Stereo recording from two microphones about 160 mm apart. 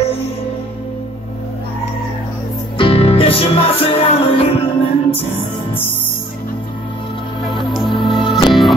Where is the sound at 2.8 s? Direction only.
35° left (ahead or behind).